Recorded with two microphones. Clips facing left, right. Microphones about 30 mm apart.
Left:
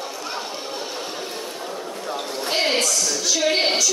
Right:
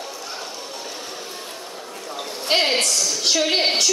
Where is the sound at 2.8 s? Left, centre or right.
Right.